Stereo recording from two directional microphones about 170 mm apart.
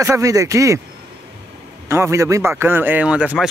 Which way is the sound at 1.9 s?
15° right (ahead or behind).